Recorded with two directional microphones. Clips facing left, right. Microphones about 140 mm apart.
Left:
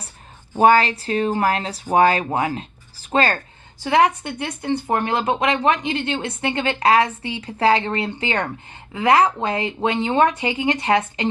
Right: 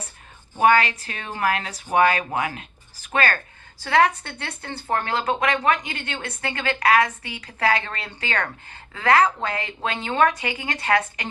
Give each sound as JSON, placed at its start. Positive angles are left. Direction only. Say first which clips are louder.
{"t": 0.5, "sound": "speech", "louder": "left 3 dB", "side_deg": 35}
{"t": 3.8, "sound": "speech", "louder": "left 2 dB", "side_deg": 20}